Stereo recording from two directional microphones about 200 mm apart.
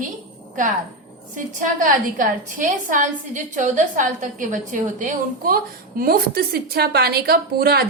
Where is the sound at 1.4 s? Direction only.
40° right (ahead or behind).